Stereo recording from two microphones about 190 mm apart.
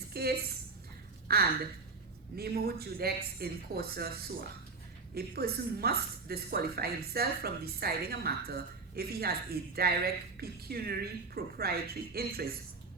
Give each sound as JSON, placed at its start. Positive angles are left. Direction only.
{"t": 0.1, "sound": "a woman's voice", "side_deg": -55}